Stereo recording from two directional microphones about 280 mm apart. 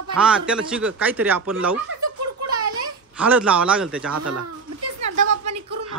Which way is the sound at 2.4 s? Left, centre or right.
Right.